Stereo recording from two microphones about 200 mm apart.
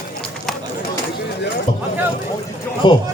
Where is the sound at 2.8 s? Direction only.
25° left (ahead or behind).